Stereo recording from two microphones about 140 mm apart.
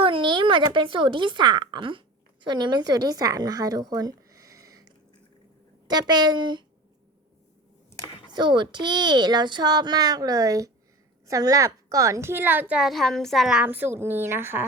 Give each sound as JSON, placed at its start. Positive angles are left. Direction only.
{"t": 0.0, "sound": "a woman's voice", "side_deg": -40}
{"t": 8.3, "sound": "a child's voice", "side_deg": -35}